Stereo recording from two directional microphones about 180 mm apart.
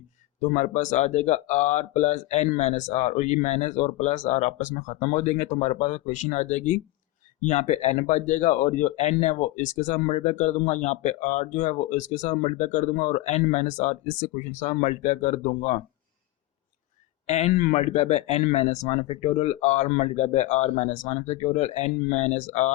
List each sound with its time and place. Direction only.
0.3 s speech: 45° left (ahead or behind)
17.2 s speech: 40° left (ahead or behind)